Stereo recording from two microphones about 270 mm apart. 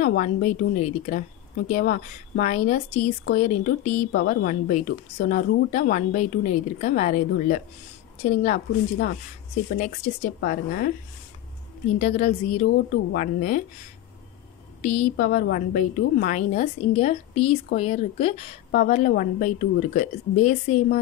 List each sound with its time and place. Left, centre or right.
0.0 s a woman's voice: left
4.1 s a woman's voice: left
9.8 s a woman's voice: left
12.0 s a woman's voice: left
14.8 s a woman's voice: left